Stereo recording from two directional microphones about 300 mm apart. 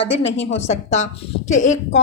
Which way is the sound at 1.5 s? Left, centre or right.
Left.